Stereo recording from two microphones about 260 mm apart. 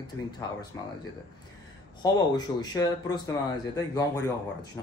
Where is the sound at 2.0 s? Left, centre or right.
Centre.